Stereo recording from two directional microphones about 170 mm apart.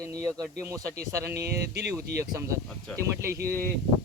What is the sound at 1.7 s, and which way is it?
Speech, 70° right (ahead or behind).